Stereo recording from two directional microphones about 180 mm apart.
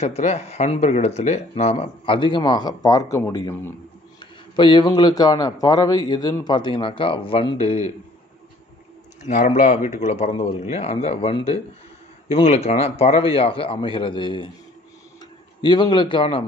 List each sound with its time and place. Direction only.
0.0 s a man's voice: 35° left (ahead or behind)
9.2 s speech: 40° left (ahead or behind)
15.6 s a man's voice: 25° left (ahead or behind)